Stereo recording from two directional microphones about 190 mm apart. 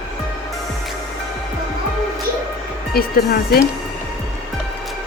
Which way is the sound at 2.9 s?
55° left (ahead or behind).